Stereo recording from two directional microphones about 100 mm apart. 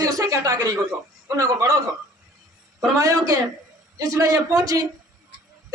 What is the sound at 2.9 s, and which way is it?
A man's voice, 35° right (ahead or behind).